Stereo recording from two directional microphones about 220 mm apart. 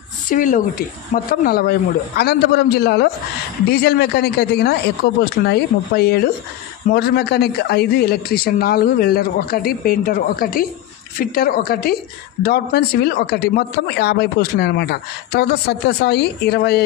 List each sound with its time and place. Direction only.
0.3 s speech: 35° left (ahead or behind)